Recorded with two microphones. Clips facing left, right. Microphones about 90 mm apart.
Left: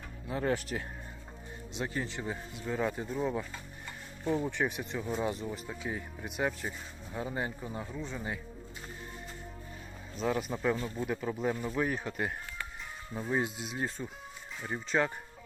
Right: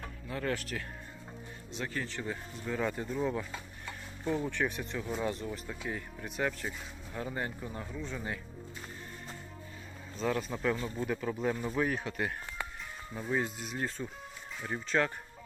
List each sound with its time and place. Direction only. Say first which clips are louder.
0.3 s speech: left 3 dB; 20° left (ahead or behind)
1.8 s speech: left 2 dB; 30° left (ahead or behind)
2.1 s speech: even; 5° left (ahead or behind)
4.4 s speech: left 1 dB; 10° left (ahead or behind)
10.2 s speech: left 1 dB; centre (ahead or behind)
13.4 s speech: left 1 dB; 5° left (ahead or behind)